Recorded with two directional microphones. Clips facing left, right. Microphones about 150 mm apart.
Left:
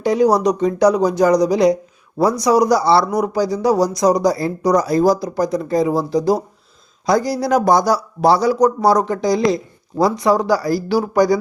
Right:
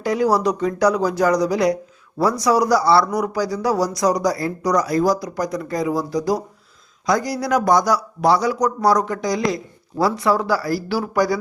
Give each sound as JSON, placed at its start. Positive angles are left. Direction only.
{"t": 0.0, "sound": "speech", "side_deg": 20}